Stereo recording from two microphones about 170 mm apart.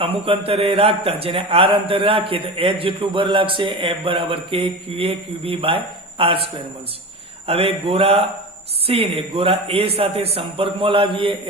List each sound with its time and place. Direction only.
0.0 s a man's voice: 35° right (ahead or behind)
7.4 s a man's voice: 35° right (ahead or behind)